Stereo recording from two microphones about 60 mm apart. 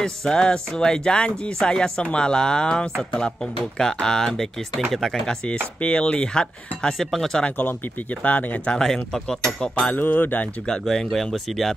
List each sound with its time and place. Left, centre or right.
0.0 s speech: centre
7.4 s speech: left
8.6 s speech: centre
9.8 s speech: left
10.7 s speech: centre